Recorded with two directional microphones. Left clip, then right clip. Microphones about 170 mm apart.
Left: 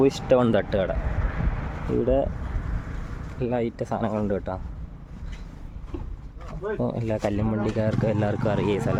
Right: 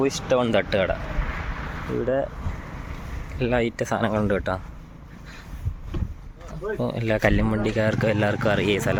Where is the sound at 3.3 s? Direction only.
Centre (ahead or behind).